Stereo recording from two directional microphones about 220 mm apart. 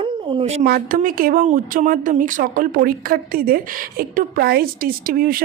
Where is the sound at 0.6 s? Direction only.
40° right (ahead or behind).